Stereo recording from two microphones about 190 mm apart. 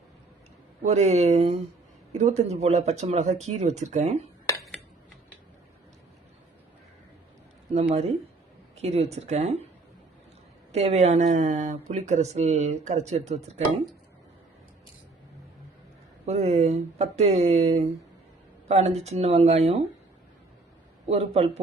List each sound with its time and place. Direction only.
0.9 s speech: 35° right (ahead or behind)
8.7 s speech: 35° right (ahead or behind)
10.7 s speech: 35° right (ahead or behind)
16.2 s speech: 35° right (ahead or behind)
21.1 s speech: 35° right (ahead or behind)